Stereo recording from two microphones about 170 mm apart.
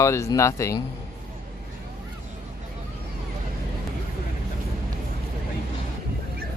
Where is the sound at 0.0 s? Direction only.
15° left (ahead or behind).